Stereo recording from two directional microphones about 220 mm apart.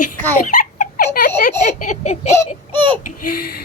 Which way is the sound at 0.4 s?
35° left (ahead or behind).